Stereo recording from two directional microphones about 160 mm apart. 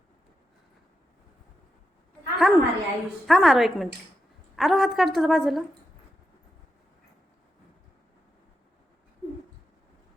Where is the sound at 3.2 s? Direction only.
Centre (ahead or behind).